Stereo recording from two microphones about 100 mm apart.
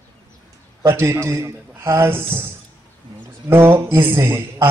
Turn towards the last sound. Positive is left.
turn(degrees=-25)  # may be behind; listen again after turning